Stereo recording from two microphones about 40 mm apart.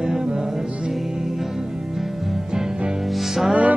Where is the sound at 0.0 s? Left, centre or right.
Centre.